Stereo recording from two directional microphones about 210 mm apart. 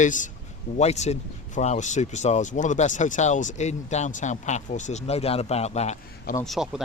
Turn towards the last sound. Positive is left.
turn(degrees=0)  # may be behind; listen again after turning